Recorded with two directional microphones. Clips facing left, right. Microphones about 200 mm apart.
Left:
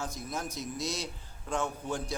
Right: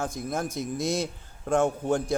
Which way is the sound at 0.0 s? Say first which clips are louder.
Right 7 dB; 50° right (ahead or behind).